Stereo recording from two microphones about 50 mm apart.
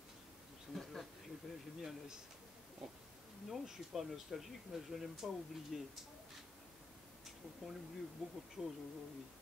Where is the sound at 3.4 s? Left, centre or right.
Centre.